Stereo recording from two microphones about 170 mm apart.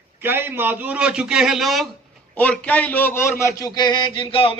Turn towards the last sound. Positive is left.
turn(degrees=30)  # may be behind; listen again after turning